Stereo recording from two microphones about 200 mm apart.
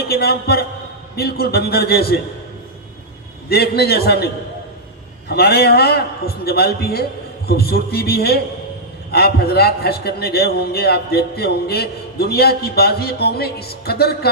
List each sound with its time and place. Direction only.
0.1 s a man's voice: 50° left (ahead or behind)
3.5 s a man's voice: 50° left (ahead or behind)
5.3 s a man's voice: 50° left (ahead or behind)